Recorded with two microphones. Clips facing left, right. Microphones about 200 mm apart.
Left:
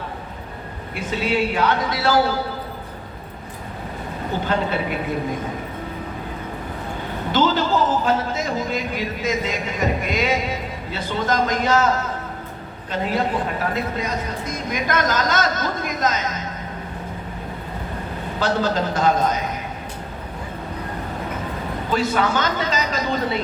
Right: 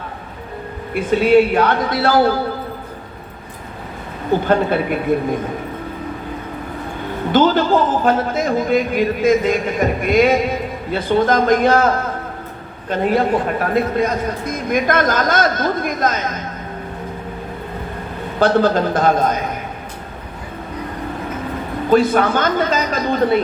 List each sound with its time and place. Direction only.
0.9 s a man's voice: 55° right (ahead or behind)
4.4 s a man's voice: 50° right (ahead or behind)
7.3 s a man's voice: 50° right (ahead or behind)
18.3 s a man's voice: 55° right (ahead or behind)
21.8 s a man's voice: 50° right (ahead or behind)